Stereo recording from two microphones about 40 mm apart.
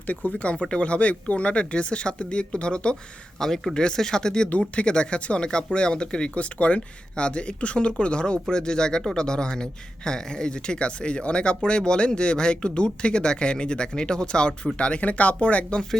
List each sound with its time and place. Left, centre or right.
0.1 s speech: left
3.4 s speech: centre
4.7 s speech: left